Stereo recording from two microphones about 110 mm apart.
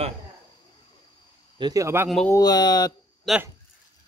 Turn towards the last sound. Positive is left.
turn(degrees=0)  # may be behind; listen again after turning